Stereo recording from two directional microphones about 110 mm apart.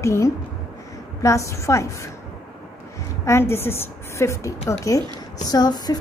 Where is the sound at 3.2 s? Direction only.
25° left (ahead or behind).